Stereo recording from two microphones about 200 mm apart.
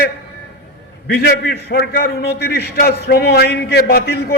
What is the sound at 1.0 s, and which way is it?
A man's voice, 50° left (ahead or behind).